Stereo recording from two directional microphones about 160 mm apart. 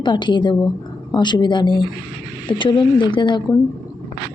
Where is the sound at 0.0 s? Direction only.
30° left (ahead or behind).